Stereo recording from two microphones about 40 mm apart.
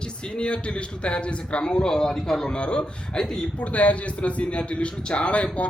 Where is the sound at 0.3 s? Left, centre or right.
Left.